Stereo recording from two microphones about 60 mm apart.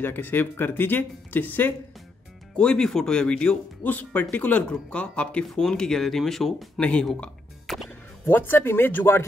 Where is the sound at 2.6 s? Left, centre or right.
Centre.